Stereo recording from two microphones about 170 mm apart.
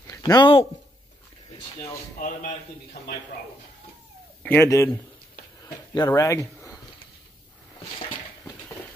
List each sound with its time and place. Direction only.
0.1 s speech: 25° left (ahead or behind)
2.1 s a man's voice: 45° left (ahead or behind)
4.4 s speech: 10° left (ahead or behind)
5.6 s a sound: 20° left (ahead or behind)